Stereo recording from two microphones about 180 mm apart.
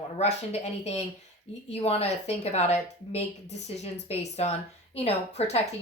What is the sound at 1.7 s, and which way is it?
A woman's voice, 35° left (ahead or behind).